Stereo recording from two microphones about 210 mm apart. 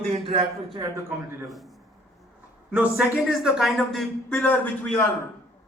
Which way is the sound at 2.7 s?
5° right (ahead or behind).